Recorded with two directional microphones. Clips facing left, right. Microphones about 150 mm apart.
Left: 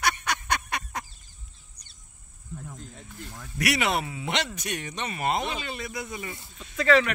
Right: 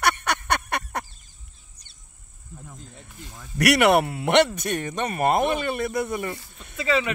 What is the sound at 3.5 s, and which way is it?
Speech, 65° right (ahead or behind).